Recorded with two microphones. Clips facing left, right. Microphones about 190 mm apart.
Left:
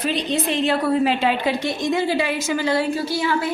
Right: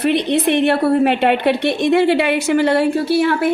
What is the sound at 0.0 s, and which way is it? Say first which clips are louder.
A woman's voice: right 7 dB; 65° right (ahead or behind).